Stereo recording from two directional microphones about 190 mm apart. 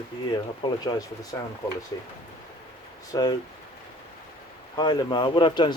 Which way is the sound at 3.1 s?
20° left (ahead or behind).